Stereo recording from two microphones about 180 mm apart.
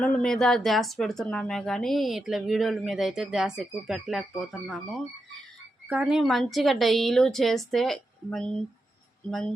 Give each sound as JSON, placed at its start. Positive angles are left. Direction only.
{"t": 0.0, "sound": "speech", "side_deg": 5}